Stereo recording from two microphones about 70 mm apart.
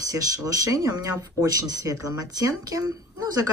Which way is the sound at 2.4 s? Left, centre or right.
Right.